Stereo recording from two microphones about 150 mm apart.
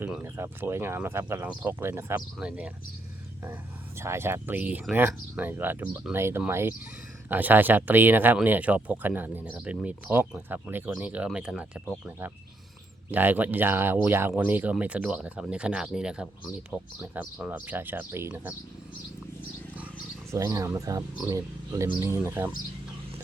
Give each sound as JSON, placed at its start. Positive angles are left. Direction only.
{"t": 0.0, "sound": "speech", "side_deg": -15}
{"t": 13.1, "sound": "speech", "side_deg": -10}
{"t": 20.3, "sound": "speech", "side_deg": -20}